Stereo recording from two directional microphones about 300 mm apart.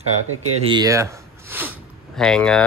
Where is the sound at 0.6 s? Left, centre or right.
Centre.